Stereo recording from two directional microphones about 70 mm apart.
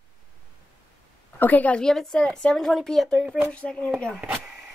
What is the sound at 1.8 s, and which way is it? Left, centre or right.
A woman's voice, centre.